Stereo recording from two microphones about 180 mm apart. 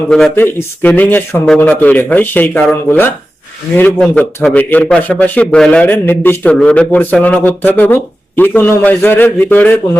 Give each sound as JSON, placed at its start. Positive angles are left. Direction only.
{"t": 0.1, "sound": "a man's voice", "side_deg": 5}